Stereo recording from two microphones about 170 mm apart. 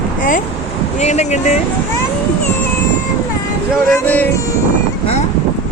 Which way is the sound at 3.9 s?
10° left (ahead or behind).